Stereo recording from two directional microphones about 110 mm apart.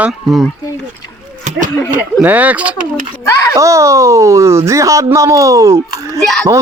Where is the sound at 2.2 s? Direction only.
15° right (ahead or behind).